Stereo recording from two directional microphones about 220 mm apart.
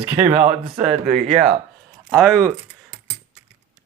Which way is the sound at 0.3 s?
30° right (ahead or behind).